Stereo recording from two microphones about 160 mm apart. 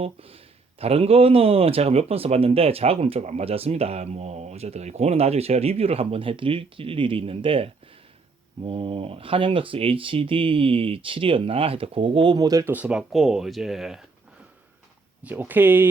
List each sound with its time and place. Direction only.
0.0 s speech: 35° right (ahead or behind); by 12.7 s 20° right (ahead or behind)
12.7 s speech: 5° right (ahead or behind)
15.2 s speech: 10° right (ahead or behind)